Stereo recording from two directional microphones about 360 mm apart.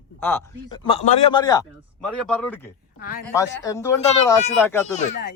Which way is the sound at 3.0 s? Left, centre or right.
Left.